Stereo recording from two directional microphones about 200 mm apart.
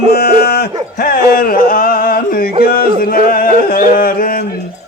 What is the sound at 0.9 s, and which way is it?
Music, 50° left (ahead or behind).